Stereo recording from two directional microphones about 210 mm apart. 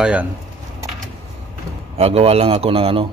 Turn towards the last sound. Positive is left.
turn(degrees=-25)  # may be behind; listen again after turning